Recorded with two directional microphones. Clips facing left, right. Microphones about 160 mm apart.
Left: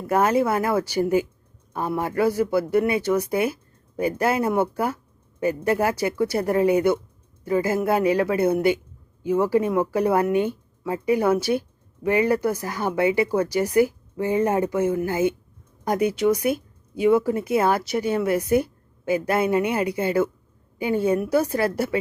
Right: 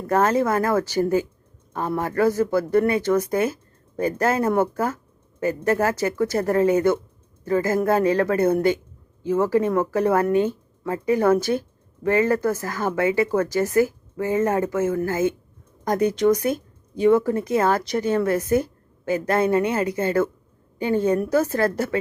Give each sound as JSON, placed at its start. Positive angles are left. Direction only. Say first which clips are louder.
{"t": 0.1, "sound": "speech", "louder": "even", "side_deg": 10}